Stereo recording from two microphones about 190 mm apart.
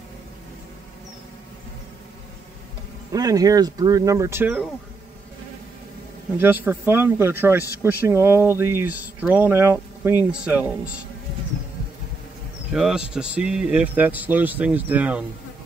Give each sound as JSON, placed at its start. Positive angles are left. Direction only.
{"t": 3.1, "sound": "a man's voice", "side_deg": -20}
{"t": 6.3, "sound": "a man's voice", "side_deg": -10}
{"t": 12.7, "sound": "a man's voice", "side_deg": 0}